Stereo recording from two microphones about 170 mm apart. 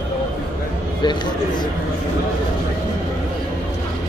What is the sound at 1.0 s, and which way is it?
Speech, 25° left (ahead or behind).